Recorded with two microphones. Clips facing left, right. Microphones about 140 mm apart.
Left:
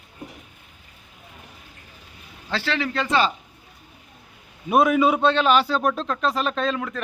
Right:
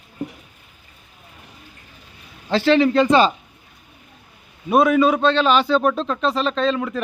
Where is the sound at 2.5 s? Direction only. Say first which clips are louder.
Right 11 dB; 20° right (ahead or behind).